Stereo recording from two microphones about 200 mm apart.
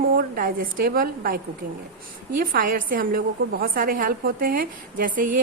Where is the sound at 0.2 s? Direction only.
45° right (ahead or behind).